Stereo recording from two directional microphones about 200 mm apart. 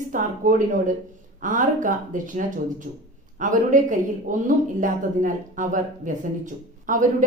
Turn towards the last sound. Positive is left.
turn(degrees=-40)  # may be behind; listen again after turning